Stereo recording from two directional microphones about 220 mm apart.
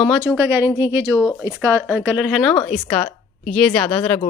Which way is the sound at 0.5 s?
10° right (ahead or behind).